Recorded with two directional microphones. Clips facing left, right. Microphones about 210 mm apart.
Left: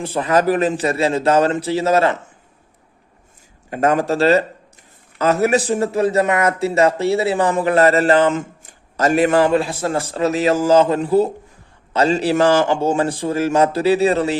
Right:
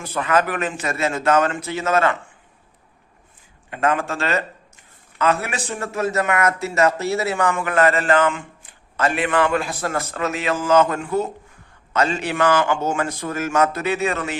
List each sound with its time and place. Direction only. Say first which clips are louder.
0.0 s a man's voice: left 4 dB; 30° left (ahead or behind)
3.7 s a man's voice: left 5 dB; 40° left (ahead or behind)